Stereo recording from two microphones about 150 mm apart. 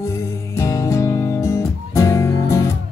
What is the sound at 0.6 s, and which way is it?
Music, 20° left (ahead or behind).